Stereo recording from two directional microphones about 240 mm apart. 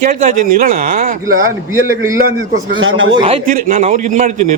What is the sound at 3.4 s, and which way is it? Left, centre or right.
A man's voice, right.